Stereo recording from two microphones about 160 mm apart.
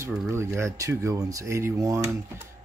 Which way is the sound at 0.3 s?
15° right (ahead or behind).